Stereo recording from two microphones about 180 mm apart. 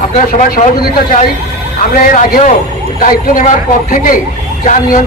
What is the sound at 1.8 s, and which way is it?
Speech, 45° left (ahead or behind).